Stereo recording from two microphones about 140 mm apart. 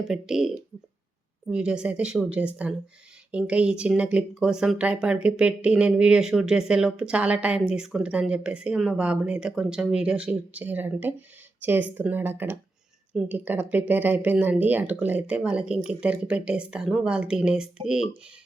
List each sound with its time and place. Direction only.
0.0 s speech: 5° right (ahead or behind)